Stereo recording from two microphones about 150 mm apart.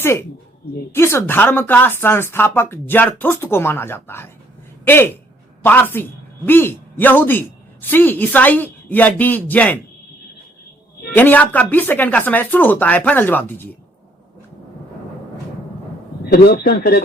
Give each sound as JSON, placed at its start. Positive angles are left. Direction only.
{"t": 0.0, "sound": "speech", "side_deg": 15}
{"t": 5.6, "sound": "speech", "side_deg": 15}
{"t": 11.1, "sound": "speech", "side_deg": 10}
{"t": 16.5, "sound": "speech", "side_deg": 90}